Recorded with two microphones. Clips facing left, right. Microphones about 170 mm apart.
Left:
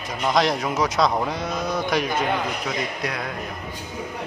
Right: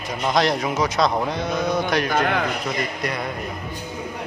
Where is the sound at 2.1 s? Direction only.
70° right (ahead or behind).